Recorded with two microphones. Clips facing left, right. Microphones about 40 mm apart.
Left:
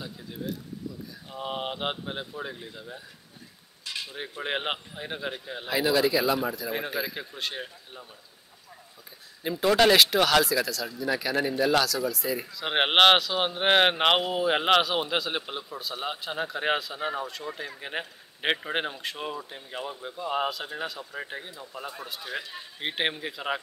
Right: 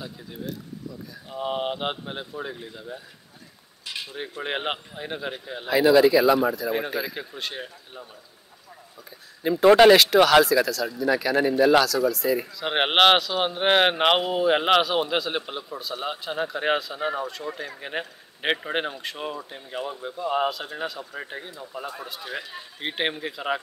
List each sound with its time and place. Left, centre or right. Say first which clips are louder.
0.0 s speech: right 1 dB; centre
3.8 s cutlery: right 1 dB; centre
4.1 s speech: right 2 dB; centre
9.4 s speech: right 8 dB; centre
9.7 s speech: right 7 dB; centre
9.9 s speech: right 5 dB; centre
12.1 s speech: right 6 dB; centre